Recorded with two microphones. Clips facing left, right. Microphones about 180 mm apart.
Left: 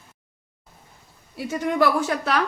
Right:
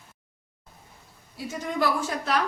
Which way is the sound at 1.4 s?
65° left (ahead or behind).